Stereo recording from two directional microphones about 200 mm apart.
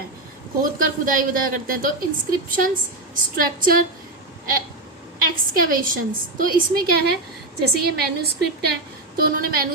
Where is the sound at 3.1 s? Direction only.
45° right (ahead or behind).